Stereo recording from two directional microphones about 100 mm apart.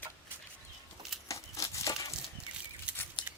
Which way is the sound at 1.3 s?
30° left (ahead or behind).